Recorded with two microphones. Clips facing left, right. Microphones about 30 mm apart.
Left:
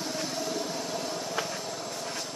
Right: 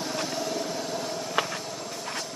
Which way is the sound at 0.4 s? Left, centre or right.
Centre.